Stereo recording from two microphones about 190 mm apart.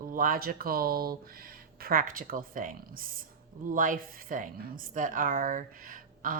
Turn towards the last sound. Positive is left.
turn(degrees=-45)  # may be behind; listen again after turning